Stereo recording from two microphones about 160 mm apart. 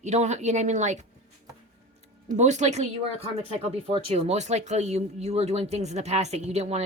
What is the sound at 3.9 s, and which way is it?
Speech, 40° right (ahead or behind).